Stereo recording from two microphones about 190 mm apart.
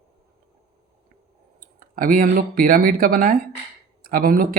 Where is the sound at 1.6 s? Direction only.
45° right (ahead or behind).